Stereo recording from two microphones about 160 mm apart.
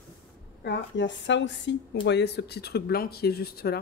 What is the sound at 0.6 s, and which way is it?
A woman's voice, 90° left.